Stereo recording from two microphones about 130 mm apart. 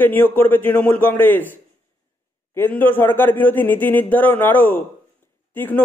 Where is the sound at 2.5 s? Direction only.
15° left (ahead or behind).